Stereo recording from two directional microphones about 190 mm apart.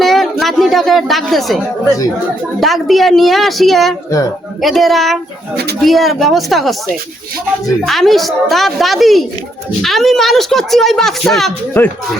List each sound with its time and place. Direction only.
0.0 s a woman's voice: centre (ahead or behind)
2.6 s speech: centre (ahead or behind)
7.9 s speech: centre (ahead or behind)